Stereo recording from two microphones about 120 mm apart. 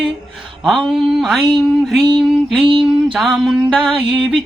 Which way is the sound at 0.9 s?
5° right (ahead or behind).